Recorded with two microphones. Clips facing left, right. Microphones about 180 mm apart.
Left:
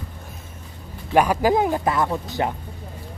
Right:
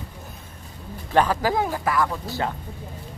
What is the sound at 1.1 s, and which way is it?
Speech, 15° left (ahead or behind).